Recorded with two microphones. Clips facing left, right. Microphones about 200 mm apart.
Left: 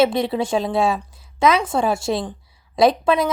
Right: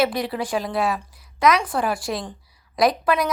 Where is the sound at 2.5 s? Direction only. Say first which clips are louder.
Left 4 dB; 25° left (ahead or behind).